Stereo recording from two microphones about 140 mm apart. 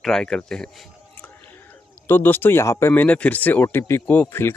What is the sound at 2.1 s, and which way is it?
Speech, 15° left (ahead or behind).